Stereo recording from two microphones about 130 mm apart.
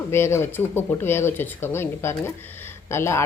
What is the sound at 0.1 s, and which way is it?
Speech, 20° left (ahead or behind).